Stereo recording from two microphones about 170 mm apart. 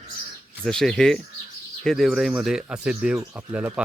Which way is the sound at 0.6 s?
Centre (ahead or behind).